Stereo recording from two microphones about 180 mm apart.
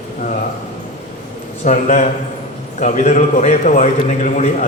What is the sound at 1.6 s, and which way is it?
A man's voice, 40° left (ahead or behind).